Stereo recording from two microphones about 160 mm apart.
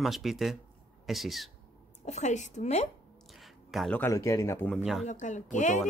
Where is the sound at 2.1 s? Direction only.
50° left (ahead or behind).